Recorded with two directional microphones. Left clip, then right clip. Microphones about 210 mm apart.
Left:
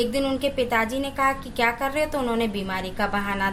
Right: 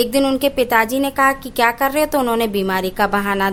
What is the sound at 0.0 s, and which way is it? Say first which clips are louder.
A woman's voice: right 7 dB; 50° right (ahead or behind).